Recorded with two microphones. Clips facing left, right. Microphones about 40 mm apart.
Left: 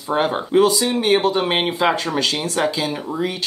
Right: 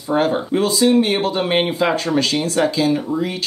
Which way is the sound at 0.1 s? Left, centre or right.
Centre.